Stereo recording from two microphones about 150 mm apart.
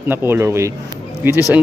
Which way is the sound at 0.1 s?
15° right (ahead or behind).